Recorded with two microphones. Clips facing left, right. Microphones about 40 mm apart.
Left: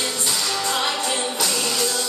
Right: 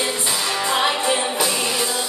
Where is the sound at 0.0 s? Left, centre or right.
Right.